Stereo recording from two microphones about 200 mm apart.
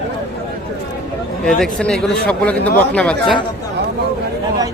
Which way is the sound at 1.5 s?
5° left (ahead or behind).